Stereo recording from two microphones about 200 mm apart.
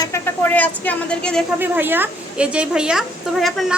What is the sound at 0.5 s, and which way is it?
Speech, 10° left (ahead or behind).